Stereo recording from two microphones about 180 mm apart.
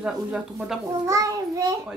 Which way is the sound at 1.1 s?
20° right (ahead or behind).